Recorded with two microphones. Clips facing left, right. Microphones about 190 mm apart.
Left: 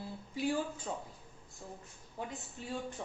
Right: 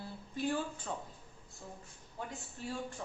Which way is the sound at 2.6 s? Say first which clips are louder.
Right 3 dB; 20° left (ahead or behind).